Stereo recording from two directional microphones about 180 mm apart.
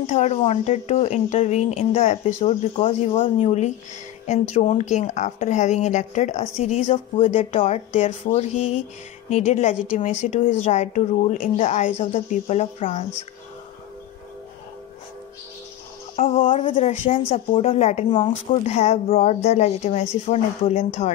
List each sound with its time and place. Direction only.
0.0 s speech: 40° left (ahead or behind)
16.4 s speech: 30° left (ahead or behind)
16.7 s speech: 45° left (ahead or behind)